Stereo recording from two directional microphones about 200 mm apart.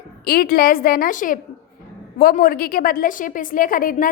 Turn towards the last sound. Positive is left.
turn(degrees=45)  # may be behind; listen again after turning